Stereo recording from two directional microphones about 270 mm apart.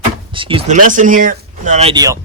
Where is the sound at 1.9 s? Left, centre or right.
Centre.